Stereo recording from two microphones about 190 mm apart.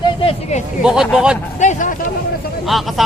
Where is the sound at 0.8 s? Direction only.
5° right (ahead or behind).